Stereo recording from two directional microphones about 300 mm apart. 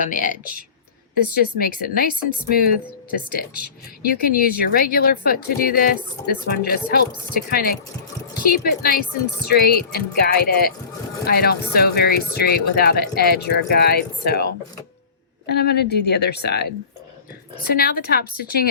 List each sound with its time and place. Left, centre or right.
0.0 s a woman's voice: left
3.1 s a woman's voice: left